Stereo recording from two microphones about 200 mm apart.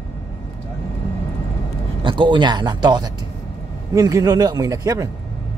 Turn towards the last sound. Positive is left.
turn(degrees=-15)  # may be behind; listen again after turning